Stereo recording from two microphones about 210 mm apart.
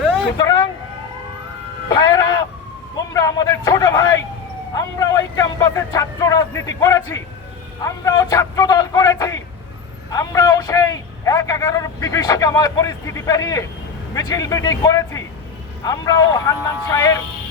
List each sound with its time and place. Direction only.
0.3 s vehicle: 20° left (ahead or behind)
1.9 s music: 15° left (ahead or behind)
3.1 s a sound: 15° left (ahead or behind)
7.8 s a man's voice: 15° left (ahead or behind)